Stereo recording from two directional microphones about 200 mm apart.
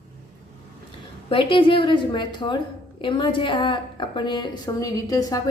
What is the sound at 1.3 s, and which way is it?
A woman's voice, 25° left (ahead or behind).